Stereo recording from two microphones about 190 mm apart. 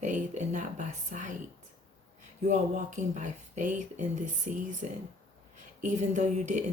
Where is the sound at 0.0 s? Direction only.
40° right (ahead or behind).